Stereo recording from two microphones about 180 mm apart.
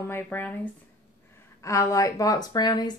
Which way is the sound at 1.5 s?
15° left (ahead or behind).